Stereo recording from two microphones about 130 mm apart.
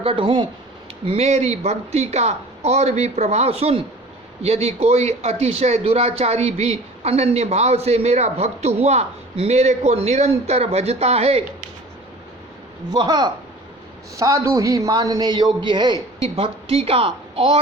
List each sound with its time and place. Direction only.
0.0 s speech: 45° right (ahead or behind)
12.9 s a man's voice: 35° right (ahead or behind)
16.2 s speech: 50° right (ahead or behind)